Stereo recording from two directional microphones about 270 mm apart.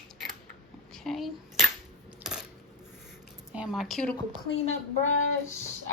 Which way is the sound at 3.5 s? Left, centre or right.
Centre.